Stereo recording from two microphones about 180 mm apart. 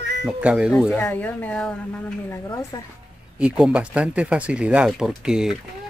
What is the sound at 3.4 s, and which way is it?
Speech, 5° right (ahead or behind).